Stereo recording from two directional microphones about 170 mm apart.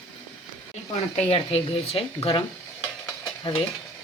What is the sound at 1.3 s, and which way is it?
Speech, 35° left (ahead or behind).